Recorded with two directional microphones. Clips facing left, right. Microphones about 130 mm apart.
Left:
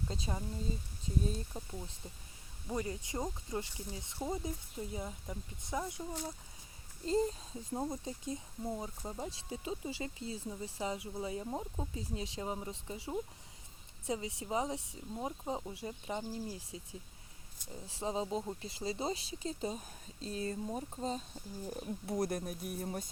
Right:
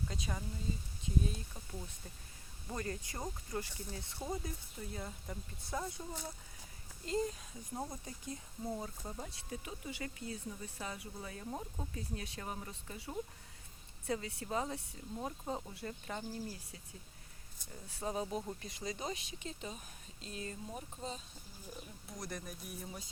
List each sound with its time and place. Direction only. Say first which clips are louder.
0.1 s speech: left 3 dB; 25° left (ahead or behind)
2.6 s speech: left 3 dB; 15° left (ahead or behind)
7.0 s speech: left 4 dB; 30° left (ahead or behind)
7.9 s speech: left 6 dB; 20° left (ahead or behind)
17.8 s speech: left 2 dB; 25° left (ahead or behind)
21.0 s speech: left 7 dB; 40° left (ahead or behind)
21.7 s speech: left 11 dB; 55° left (ahead or behind)
22.8 s music: left 10 dB; 50° left (ahead or behind)